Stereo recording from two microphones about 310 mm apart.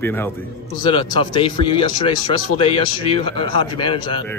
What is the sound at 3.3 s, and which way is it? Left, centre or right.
Speech, centre.